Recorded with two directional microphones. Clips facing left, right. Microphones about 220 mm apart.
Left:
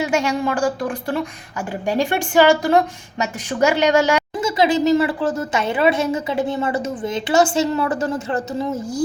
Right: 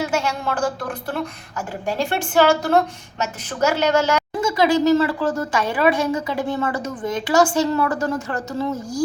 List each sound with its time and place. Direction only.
0.1 s a woman's voice: 15° left (ahead or behind)